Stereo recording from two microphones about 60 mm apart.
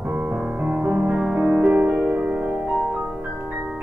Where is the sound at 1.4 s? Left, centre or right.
Right.